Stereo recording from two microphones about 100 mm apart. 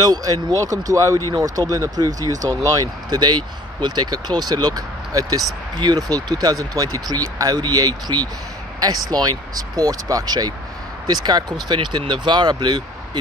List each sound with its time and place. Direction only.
0.0 s speech: 40° right (ahead or behind)